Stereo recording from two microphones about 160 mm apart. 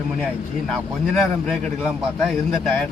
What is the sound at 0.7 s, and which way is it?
Speech, centre (ahead or behind).